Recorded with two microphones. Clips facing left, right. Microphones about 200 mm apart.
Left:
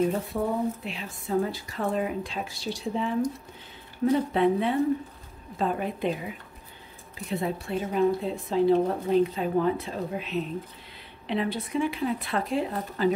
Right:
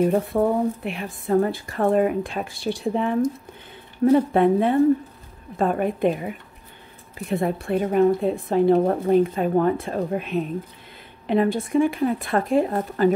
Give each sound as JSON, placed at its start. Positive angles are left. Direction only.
{"t": 0.0, "sound": "a woman's voice", "side_deg": -55}